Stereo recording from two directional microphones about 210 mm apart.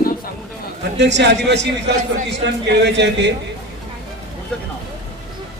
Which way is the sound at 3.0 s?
55° right (ahead or behind).